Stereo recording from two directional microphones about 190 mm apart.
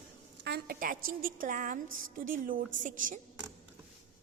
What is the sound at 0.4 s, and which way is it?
A woman's voice, 55° right (ahead or behind).